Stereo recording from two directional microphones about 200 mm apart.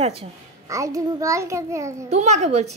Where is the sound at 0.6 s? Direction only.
15° right (ahead or behind).